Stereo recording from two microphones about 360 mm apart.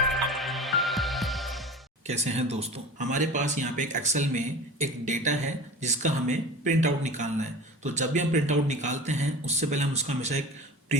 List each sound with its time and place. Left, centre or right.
0.0 s music: centre
2.0 s speech: centre